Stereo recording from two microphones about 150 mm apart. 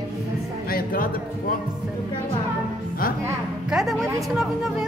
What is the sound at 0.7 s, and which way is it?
Speech, 70° left (ahead or behind).